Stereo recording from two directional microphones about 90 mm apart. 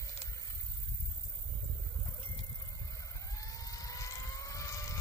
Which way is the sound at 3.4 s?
40° left (ahead or behind).